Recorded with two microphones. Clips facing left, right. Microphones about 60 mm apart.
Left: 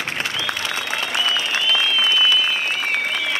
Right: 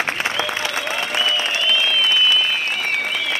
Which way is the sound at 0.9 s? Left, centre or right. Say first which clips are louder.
Even; right.